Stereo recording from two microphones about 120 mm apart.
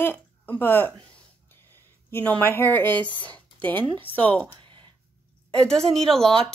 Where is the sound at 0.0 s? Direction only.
15° left (ahead or behind).